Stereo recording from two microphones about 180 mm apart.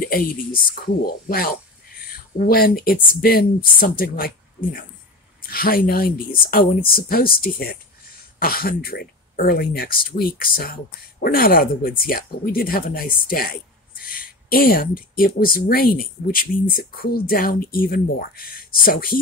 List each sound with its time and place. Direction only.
0.0 s speech: 55° left (ahead or behind)